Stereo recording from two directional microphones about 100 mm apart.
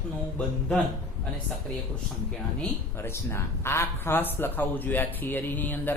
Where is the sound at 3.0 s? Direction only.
25° left (ahead or behind).